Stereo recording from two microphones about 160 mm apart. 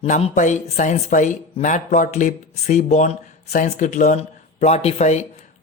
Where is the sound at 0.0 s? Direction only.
45° left (ahead or behind).